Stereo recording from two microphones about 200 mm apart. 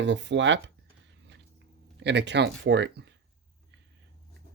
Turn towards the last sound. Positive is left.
turn(degrees=-60)  # may be behind; listen again after turning